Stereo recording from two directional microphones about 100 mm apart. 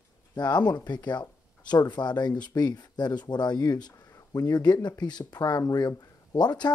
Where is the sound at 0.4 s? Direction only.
45° left (ahead or behind).